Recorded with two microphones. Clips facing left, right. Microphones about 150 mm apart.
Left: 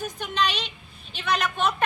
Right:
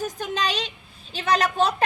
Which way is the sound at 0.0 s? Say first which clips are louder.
Even; 40° right (ahead or behind).